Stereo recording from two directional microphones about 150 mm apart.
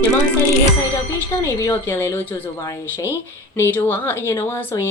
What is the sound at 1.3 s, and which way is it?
Speech, 20° left (ahead or behind).